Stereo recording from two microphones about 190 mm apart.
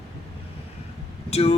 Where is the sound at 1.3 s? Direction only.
30° left (ahead or behind).